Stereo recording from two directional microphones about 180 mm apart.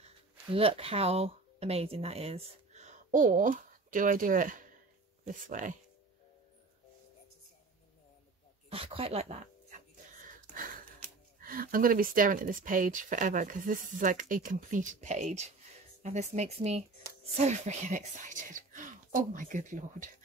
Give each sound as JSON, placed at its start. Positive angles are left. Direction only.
{"t": 0.0, "sound": "speech", "side_deg": -30}
{"t": 8.6, "sound": "a sound", "side_deg": -30}
{"t": 10.5, "sound": "speech", "side_deg": -50}